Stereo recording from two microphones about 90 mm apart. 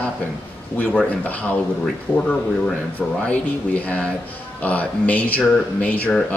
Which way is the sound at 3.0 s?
15° left (ahead or behind).